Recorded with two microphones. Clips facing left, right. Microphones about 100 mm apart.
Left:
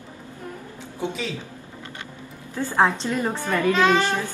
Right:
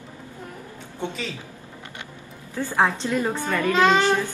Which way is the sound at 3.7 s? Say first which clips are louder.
Right 1 dB; 15° right (ahead or behind).